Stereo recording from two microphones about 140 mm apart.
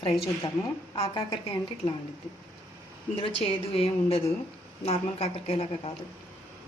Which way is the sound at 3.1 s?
45° left (ahead or behind).